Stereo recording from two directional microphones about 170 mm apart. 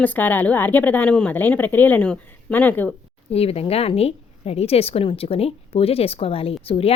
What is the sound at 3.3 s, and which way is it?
A woman's voice, 35° left (ahead or behind).